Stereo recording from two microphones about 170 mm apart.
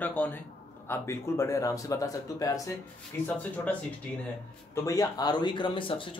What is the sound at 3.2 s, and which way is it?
Speech, 10° left (ahead or behind).